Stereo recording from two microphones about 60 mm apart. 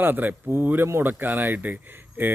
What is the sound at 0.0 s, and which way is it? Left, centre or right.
A man's voice, right.